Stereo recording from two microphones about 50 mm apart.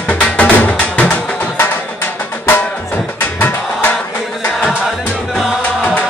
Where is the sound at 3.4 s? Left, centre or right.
Left.